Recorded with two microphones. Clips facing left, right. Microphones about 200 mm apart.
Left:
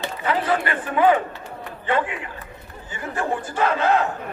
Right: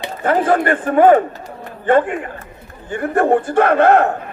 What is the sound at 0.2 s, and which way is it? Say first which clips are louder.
A man's voice: right 8 dB; 50° right (ahead or behind).